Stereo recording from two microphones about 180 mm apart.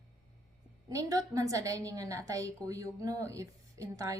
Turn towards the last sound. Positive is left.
turn(degrees=-20)  # may be behind; listen again after turning